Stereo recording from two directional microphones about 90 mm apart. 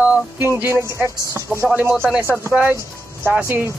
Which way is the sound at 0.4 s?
25° right (ahead or behind).